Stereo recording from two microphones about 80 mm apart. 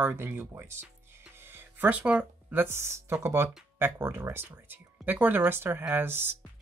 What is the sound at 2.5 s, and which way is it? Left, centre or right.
Speech, right.